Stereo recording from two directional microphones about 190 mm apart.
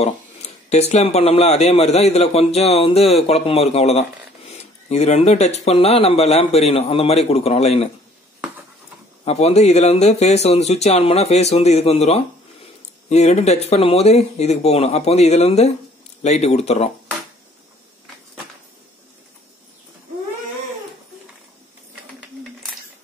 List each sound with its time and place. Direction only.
0.0 s speech: 35° left (ahead or behind)
9.2 s speech: 35° left (ahead or behind)